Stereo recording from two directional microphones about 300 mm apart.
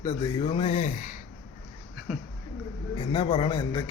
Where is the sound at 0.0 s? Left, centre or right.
Centre.